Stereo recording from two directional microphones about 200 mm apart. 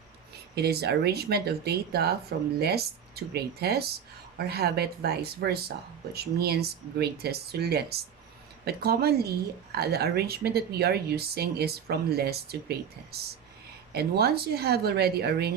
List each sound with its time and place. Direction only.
0.5 s speech: 55° right (ahead or behind)